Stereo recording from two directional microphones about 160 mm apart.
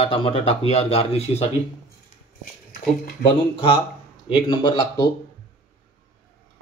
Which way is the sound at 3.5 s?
30° left (ahead or behind).